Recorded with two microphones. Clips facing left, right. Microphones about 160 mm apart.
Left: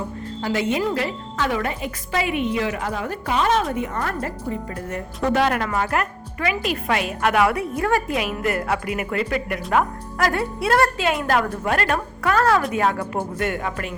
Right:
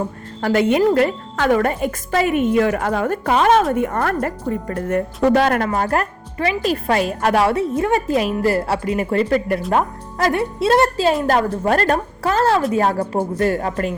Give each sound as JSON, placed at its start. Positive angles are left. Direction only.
{"t": 0.4, "sound": "a woman's voice", "side_deg": -55}
{"t": 5.3, "sound": "a woman's voice", "side_deg": -40}